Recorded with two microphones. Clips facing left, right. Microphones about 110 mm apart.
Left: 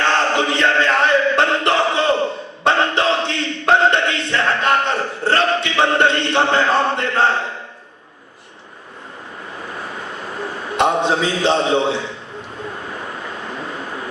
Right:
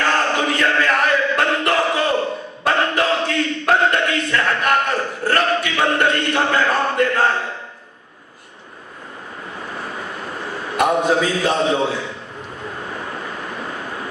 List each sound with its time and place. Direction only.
0.0 s chant: 25° left (ahead or behind)
2.6 s a sound: 25° left (ahead or behind)
10.8 s a man's voice: 25° left (ahead or behind)